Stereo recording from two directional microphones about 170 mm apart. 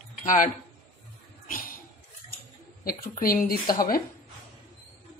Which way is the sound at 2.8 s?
55° left (ahead or behind).